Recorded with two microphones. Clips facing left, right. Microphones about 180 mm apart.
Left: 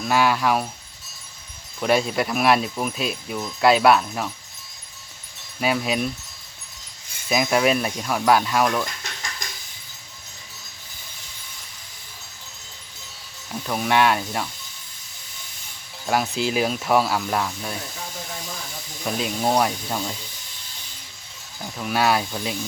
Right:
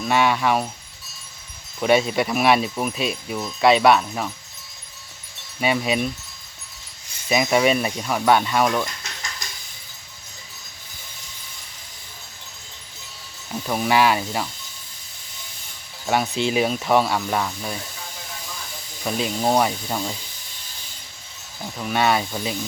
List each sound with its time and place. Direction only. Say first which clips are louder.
0.0 s speech: even; centre (ahead or behind)
1.8 s speech: right 2 dB; centre (ahead or behind)
5.5 s speech: right 1 dB; centre (ahead or behind)
7.3 s speech: right 1 dB; centre (ahead or behind)
13.5 s speech: right 1 dB; 5° right (ahead or behind)
16.0 s speech: right 1 dB; centre (ahead or behind)
19.0 s speech: right 1 dB; centre (ahead or behind)
21.6 s speech: right 1 dB; centre (ahead or behind)